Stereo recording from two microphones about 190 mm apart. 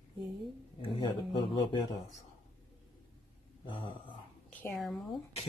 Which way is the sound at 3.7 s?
25° left (ahead or behind).